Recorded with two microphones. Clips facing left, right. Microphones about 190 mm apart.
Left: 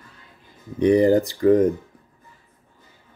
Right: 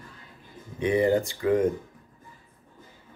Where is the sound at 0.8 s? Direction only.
40° left (ahead or behind).